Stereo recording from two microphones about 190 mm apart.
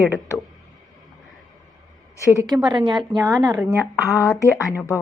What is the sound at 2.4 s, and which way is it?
A woman's voice, 20° right (ahead or behind).